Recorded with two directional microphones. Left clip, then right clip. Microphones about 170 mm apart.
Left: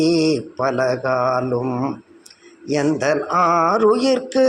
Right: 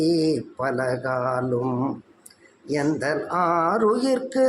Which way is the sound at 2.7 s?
10° left (ahead or behind).